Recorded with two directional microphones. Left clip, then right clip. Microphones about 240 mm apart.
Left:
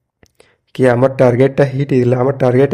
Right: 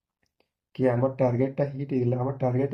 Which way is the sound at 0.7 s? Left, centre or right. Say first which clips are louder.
Left 13 dB; left.